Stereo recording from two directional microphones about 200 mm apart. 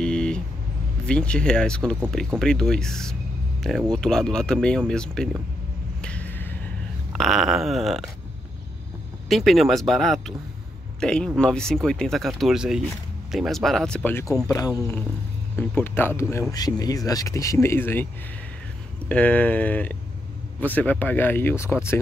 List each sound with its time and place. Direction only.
0.0 s vehicle: 5° left (ahead or behind)
1.0 s speech: 5° left (ahead or behind)
6.0 s a sound: 5° left (ahead or behind)
7.1 s speech: centre (ahead or behind)
9.3 s speech: centre (ahead or behind)
19.0 s speech: 5° left (ahead or behind)